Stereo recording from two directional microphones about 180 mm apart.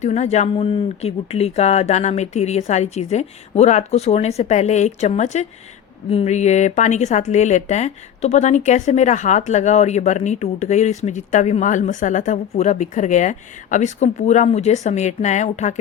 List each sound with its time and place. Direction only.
0.0 s speech: 35° left (ahead or behind)